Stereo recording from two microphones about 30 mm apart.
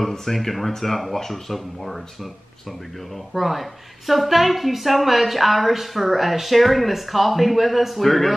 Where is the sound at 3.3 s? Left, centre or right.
Centre.